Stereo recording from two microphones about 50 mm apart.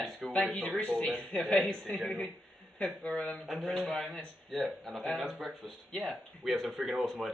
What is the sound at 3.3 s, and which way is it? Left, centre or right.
Speech, centre.